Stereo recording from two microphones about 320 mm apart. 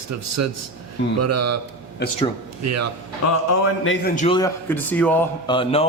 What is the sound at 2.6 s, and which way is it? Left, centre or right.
Speech, right.